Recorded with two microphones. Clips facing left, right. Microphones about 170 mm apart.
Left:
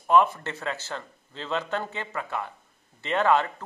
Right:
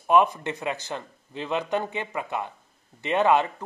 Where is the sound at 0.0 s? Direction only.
15° right (ahead or behind).